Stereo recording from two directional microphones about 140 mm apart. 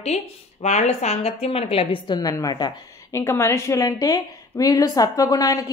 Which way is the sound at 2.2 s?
25° left (ahead or behind).